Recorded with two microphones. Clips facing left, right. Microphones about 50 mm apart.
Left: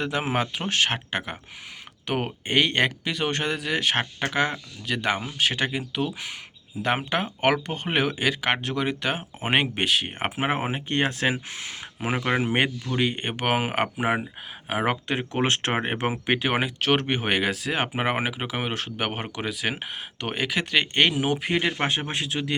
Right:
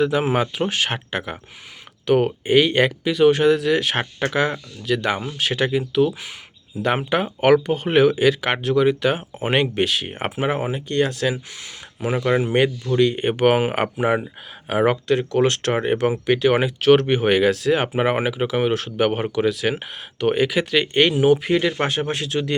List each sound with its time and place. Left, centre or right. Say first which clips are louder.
0.0 s speech: right 7 dB; centre
2.5 s speech: right 5 dB; centre
10.3 s speech: right 4 dB; left
13.1 s speech: right 8 dB; centre
14.0 s speech: right 6 dB; centre
14.7 s speech: right 6 dB; centre
15.0 s speech: right 7 dB; left
16.5 s speech: right 10 dB; centre
21.6 s speech: right 4 dB; centre